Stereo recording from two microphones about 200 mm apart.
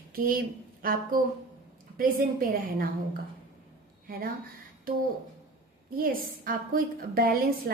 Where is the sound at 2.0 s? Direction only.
45° right (ahead or behind).